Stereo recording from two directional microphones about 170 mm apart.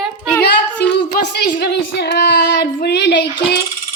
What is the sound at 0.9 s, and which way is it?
Speech, 75° left (ahead or behind).